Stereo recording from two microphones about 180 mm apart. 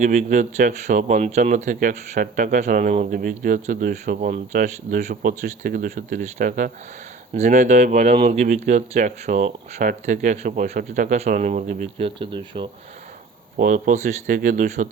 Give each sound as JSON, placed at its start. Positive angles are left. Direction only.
{"t": 0.0, "sound": "speech", "side_deg": -45}
{"t": 13.6, "sound": "speech", "side_deg": -45}